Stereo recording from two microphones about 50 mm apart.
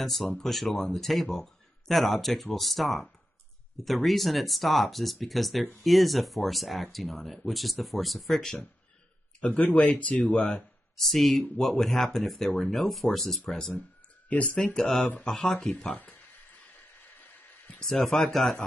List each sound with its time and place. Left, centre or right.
0.0 s speech: centre
9.4 s speech: left
11.0 s speech: centre
14.3 s speech: left
14.6 s speech: centre
15.9 s a sound: left
17.6 s a sound: centre
17.9 s speech: centre